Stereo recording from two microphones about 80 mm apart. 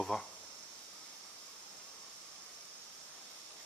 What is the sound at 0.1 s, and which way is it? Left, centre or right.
Speech, centre.